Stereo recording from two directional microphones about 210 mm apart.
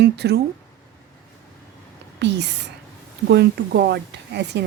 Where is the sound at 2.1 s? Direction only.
55° right (ahead or behind).